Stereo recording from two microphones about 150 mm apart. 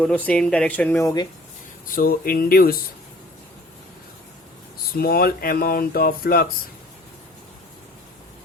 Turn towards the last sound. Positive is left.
turn(degrees=80)